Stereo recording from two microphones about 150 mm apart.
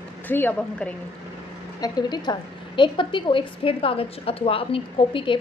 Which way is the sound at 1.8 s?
30° left (ahead or behind).